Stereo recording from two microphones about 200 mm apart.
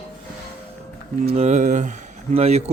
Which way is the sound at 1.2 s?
35° right (ahead or behind).